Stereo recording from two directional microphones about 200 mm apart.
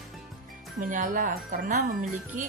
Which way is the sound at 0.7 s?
40° right (ahead or behind).